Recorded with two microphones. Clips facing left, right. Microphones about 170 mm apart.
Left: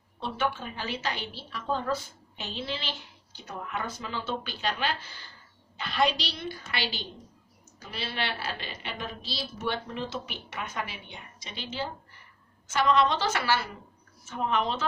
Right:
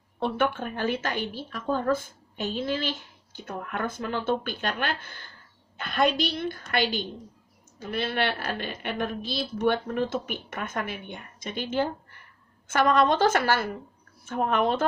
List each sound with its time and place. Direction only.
0.2 s a woman's voice: 55° right (ahead or behind)